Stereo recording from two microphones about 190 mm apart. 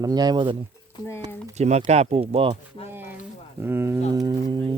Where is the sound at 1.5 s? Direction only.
35° right (ahead or behind).